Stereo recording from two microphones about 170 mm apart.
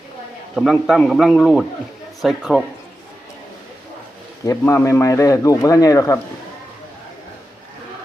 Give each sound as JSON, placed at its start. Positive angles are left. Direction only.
{"t": 0.5, "sound": "a man's voice", "side_deg": 0}
{"t": 4.4, "sound": "speech", "side_deg": 15}